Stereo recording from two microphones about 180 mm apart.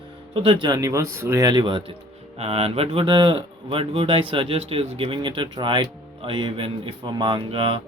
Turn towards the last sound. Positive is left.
turn(degrees=-30)  # may be behind; listen again after turning